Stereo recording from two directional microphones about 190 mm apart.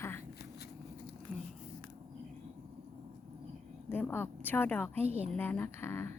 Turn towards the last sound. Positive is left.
turn(degrees=10)  # may be behind; listen again after turning